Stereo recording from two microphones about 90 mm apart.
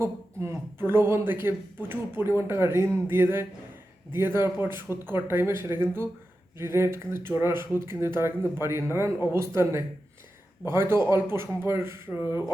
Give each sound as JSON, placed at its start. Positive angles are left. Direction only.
{"t": 0.0, "sound": "speech", "side_deg": -30}
{"t": 10.7, "sound": "speech", "side_deg": -30}